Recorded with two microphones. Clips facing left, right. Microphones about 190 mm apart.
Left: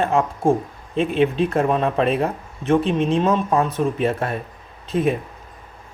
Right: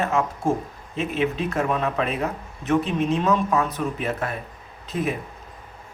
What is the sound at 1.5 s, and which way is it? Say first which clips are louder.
Speech: left 5 dB; 30° left (ahead or behind).